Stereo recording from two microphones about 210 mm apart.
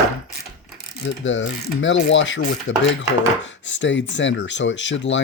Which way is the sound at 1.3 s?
65° left (ahead or behind).